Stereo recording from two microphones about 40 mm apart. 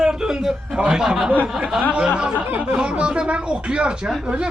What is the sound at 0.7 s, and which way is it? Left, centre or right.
A man's voice, right.